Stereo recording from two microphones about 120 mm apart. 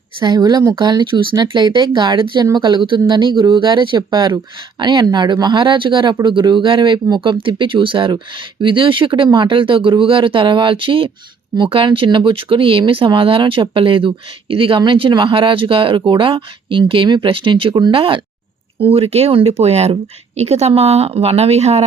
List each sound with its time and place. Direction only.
0.2 s speech: 35° right (ahead or behind); by 21.8 s 60° right (ahead or behind)